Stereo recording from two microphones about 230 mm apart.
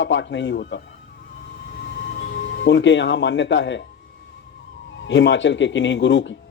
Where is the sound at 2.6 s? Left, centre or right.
Left.